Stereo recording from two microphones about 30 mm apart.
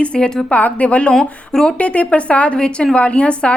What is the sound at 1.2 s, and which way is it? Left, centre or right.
Speech, left.